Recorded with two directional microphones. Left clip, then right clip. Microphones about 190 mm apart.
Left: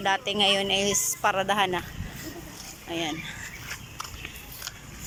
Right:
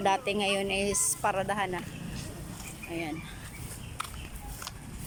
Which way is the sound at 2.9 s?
5° right (ahead or behind).